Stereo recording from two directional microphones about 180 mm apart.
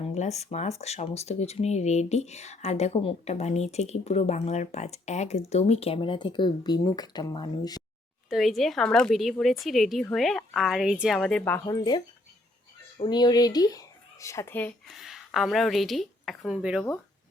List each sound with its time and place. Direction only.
0.0 s speech: 40° left (ahead or behind)
8.3 s speech: centre (ahead or behind)
14.8 s a woman's voice: centre (ahead or behind)